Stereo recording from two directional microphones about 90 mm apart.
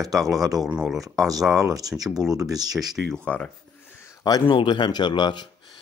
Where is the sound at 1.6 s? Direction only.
40° right (ahead or behind).